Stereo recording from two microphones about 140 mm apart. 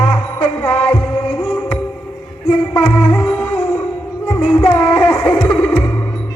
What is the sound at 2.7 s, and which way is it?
Music, 15° left (ahead or behind).